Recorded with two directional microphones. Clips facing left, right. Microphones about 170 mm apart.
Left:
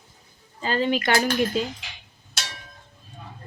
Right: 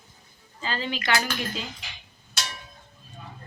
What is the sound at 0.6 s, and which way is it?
Speech, 50° left (ahead or behind).